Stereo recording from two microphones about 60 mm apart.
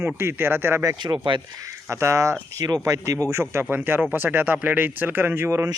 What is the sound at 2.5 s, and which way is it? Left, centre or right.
Speech, right.